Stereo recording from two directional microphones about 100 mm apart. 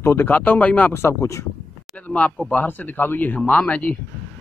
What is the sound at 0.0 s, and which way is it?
Speech, 20° left (ahead or behind).